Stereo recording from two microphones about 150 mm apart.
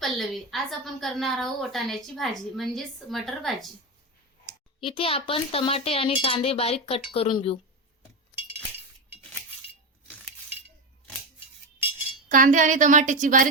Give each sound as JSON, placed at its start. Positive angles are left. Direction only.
{"t": 0.0, "sound": "a woman's voice", "side_deg": 0}
{"t": 4.8, "sound": "speech", "side_deg": 35}
{"t": 12.3, "sound": "a woman's voice", "side_deg": -60}